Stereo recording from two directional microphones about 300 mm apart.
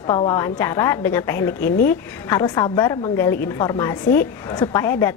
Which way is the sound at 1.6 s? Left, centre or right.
Left.